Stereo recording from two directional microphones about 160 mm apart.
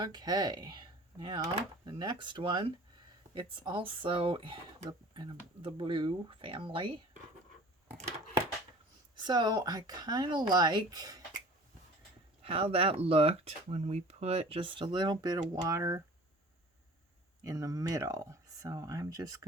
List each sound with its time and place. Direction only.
0.0 s speech: 25° right (ahead or behind)
9.1 s speech: 30° right (ahead or behind)
12.4 s speech: 35° right (ahead or behind); by 16.0 s 20° right (ahead or behind)
17.4 s speech: 20° right (ahead or behind)